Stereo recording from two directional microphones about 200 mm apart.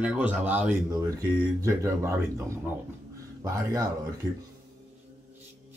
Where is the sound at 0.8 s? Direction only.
20° right (ahead or behind).